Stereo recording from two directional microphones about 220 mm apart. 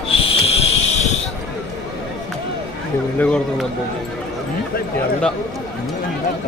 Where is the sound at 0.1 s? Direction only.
25° left (ahead or behind).